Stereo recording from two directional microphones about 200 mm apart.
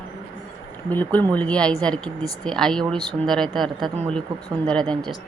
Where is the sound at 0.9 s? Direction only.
10° left (ahead or behind).